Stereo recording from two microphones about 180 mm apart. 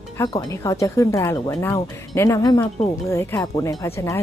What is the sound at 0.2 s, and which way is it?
Speech, 15° left (ahead or behind).